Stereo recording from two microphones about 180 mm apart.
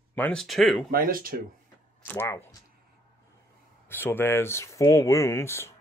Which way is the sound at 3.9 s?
10° left (ahead or behind).